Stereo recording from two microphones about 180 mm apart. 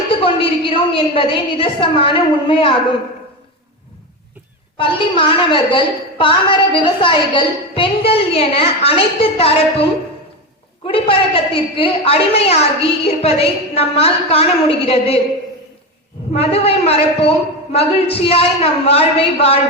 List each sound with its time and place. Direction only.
0.1 s a woman's voice: 30° left (ahead or behind)
4.8 s a woman's voice: 30° left (ahead or behind)
10.8 s a woman's voice: 30° left (ahead or behind)
16.3 s a woman's voice: 35° left (ahead or behind)